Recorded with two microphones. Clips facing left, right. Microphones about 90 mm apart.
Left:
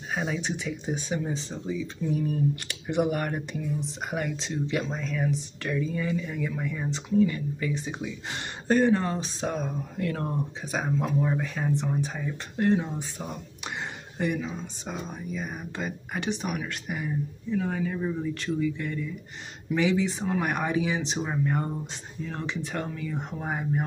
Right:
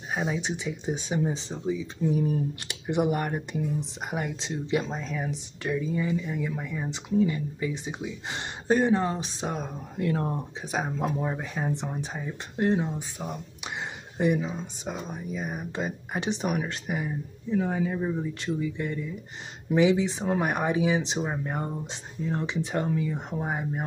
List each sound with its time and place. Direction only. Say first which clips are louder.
0.3 s speech: even; 20° right (ahead or behind)